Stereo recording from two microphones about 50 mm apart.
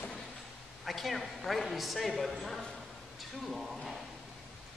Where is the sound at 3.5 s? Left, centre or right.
Centre.